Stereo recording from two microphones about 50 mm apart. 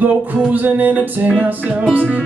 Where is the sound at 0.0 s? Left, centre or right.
Right.